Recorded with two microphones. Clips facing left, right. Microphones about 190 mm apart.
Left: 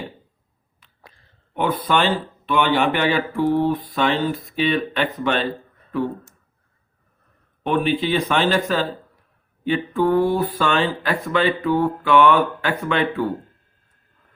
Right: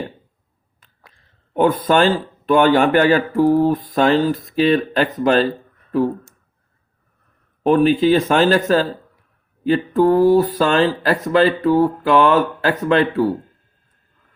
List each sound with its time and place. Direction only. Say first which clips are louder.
1.5 s speech: right 6 dB; 45° right (ahead or behind)
7.6 s speech: right 7 dB; 40° right (ahead or behind)